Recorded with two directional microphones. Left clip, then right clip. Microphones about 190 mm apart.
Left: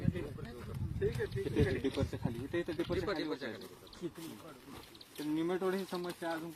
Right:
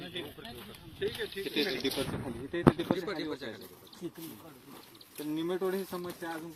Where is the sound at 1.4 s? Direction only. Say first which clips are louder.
Right 3 dB; centre (ahead or behind).